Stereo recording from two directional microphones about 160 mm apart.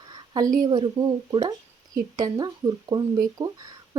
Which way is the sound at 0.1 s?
25° right (ahead or behind).